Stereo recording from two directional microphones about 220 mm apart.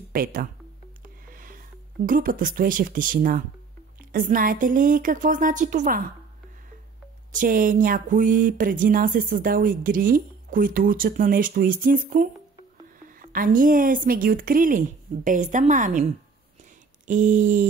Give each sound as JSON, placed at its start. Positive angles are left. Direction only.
{"t": 0.1, "sound": "speech", "side_deg": -40}
{"t": 1.3, "sound": "a sound", "side_deg": -40}
{"t": 2.0, "sound": "speech", "side_deg": -40}
{"t": 7.3, "sound": "speech", "side_deg": -40}
{"t": 13.3, "sound": "speech", "side_deg": -40}